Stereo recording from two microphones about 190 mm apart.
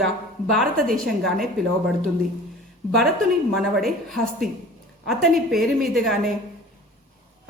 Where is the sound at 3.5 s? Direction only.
Centre (ahead or behind).